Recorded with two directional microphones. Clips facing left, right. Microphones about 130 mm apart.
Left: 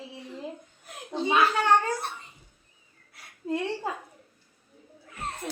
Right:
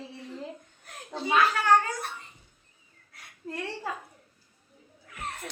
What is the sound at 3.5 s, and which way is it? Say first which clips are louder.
Speech: left 6 dB; 20° left (ahead or behind).